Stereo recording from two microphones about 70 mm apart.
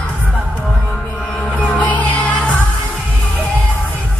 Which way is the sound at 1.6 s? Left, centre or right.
Centre.